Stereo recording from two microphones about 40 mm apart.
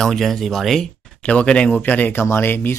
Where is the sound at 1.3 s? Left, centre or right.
Left.